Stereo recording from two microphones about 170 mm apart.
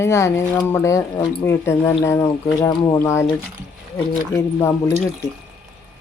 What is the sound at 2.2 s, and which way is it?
Speech, 25° left (ahead or behind).